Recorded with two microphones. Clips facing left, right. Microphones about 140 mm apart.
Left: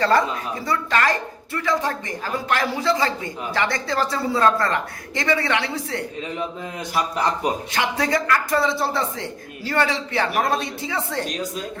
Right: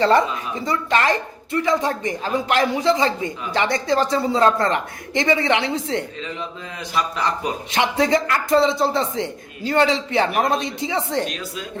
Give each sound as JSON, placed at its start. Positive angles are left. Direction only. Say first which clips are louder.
{"t": 0.0, "sound": "a woman's voice", "louder": "right 2 dB", "side_deg": -20}
{"t": 7.7, "sound": "a man's voice", "louder": "right 7 dB", "side_deg": -20}